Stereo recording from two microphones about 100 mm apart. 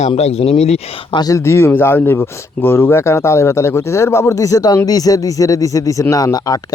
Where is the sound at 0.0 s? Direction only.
90° left.